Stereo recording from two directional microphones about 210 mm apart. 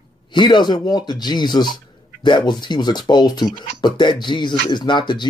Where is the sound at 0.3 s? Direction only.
20° left (ahead or behind).